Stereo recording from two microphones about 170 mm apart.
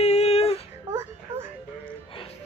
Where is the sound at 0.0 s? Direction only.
40° left (ahead or behind).